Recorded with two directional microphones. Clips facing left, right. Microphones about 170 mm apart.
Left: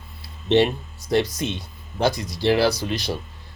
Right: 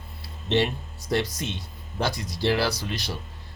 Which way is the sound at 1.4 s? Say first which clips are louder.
Left 5 dB; 15° left (ahead or behind).